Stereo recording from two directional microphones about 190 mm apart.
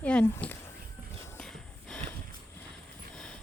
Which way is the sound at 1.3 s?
5° left (ahead or behind).